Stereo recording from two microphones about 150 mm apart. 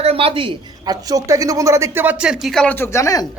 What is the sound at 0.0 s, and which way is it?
A woman's voice, 40° right (ahead or behind).